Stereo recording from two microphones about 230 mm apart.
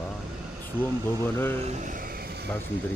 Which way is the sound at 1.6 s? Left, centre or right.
Right.